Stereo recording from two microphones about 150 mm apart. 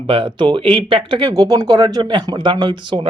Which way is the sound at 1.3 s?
25° right (ahead or behind).